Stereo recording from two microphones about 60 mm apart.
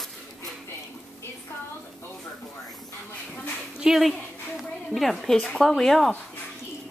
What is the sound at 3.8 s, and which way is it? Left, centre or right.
A woman's voice, centre.